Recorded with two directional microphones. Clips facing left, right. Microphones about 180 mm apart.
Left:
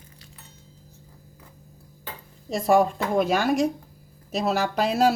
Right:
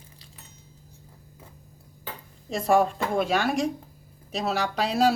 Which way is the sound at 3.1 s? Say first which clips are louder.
Left 4 dB; 40° left (ahead or behind).